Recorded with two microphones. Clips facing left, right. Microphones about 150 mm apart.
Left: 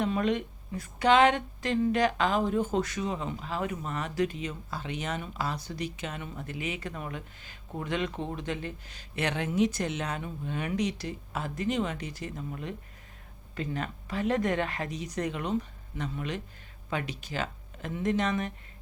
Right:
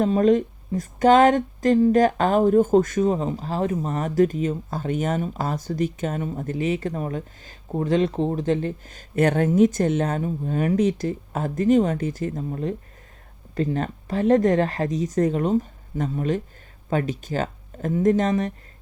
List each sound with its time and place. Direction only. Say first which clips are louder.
0.0 s speech: right 10 dB; 40° right (ahead or behind)